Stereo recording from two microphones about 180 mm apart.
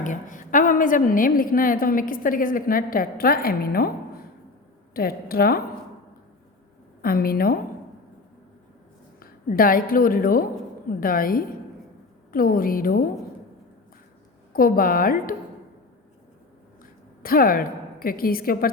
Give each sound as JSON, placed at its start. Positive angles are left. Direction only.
{"t": 0.0, "sound": "a woman's voice", "side_deg": 45}
{"t": 4.9, "sound": "a woman's voice", "side_deg": 55}
{"t": 7.0, "sound": "a woman's voice", "side_deg": 55}
{"t": 9.2, "sound": "a woman's voice", "side_deg": 55}
{"t": 14.5, "sound": "a woman's voice", "side_deg": 50}
{"t": 17.2, "sound": "a woman's voice", "side_deg": 55}